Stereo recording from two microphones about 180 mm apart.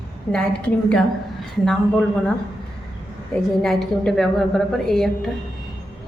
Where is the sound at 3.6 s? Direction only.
5° left (ahead or behind).